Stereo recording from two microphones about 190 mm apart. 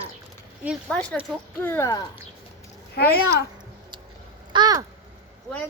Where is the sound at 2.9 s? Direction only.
55° left (ahead or behind).